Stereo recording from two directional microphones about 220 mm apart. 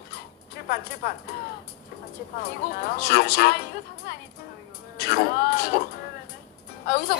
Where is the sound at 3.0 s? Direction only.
45° left (ahead or behind).